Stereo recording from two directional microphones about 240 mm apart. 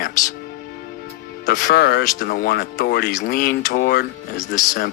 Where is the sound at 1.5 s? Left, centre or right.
Left.